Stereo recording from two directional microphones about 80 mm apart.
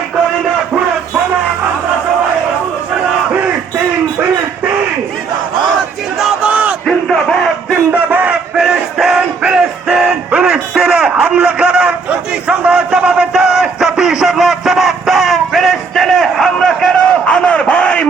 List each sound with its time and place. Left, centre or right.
6.5 s battle cry: centre
6.8 s crowd: centre
8.1 s battle cry: centre
10.4 s a sound: centre